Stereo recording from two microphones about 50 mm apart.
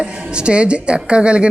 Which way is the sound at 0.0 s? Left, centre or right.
Right.